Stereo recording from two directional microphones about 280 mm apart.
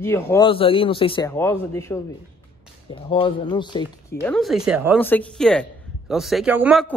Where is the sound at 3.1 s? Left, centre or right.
Centre.